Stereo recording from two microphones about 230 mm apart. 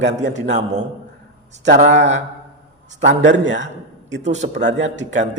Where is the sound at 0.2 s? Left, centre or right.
Right.